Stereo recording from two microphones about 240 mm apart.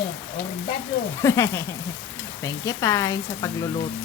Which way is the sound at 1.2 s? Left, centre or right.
Centre.